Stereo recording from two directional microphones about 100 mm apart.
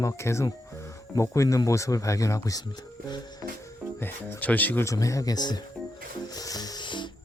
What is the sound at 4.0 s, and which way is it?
Speech, 20° left (ahead or behind).